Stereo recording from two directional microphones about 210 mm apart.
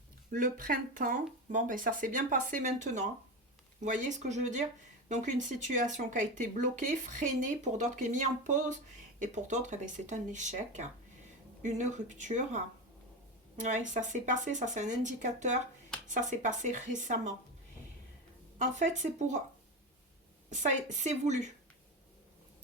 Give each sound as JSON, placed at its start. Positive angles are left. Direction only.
{"t": 0.3, "sound": "speech", "side_deg": -40}
{"t": 18.6, "sound": "speech", "side_deg": -35}
{"t": 20.5, "sound": "speech", "side_deg": -35}